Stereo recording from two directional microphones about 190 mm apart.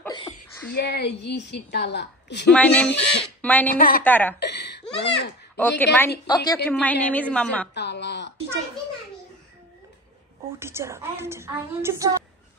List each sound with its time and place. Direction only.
0.7 s a woman's voice: 60° left (ahead or behind)
2.5 s a woman's voice: 5° left (ahead or behind)
2.9 s a woman's voice: 65° left (ahead or behind)
3.4 s a woman's voice: 10° left (ahead or behind)
3.7 s a woman's voice: 50° left (ahead or behind)
4.0 s a woman's voice: 10° left (ahead or behind)
4.4 s laughter: 60° left (ahead or behind)
5.0 s a woman's voice: 65° left (ahead or behind)
5.6 s a woman's voice: 10° left (ahead or behind)
6.2 s a woman's voice: 20° left (ahead or behind)
6.7 s a woman's voice: 10° left (ahead or behind)
7.7 s a sound: 65° left (ahead or behind)
10.6 s a woman's voice: 15° right (ahead or behind)